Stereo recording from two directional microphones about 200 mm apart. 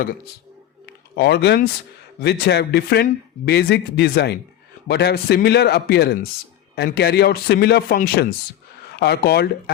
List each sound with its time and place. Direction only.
0.9 s a man's voice: 55° left (ahead or behind)